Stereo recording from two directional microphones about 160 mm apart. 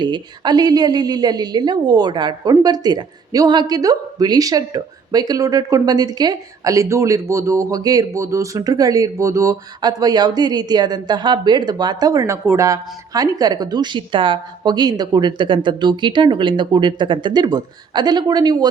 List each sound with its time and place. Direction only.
0.0 s a woman's voice: 25° right (ahead or behind)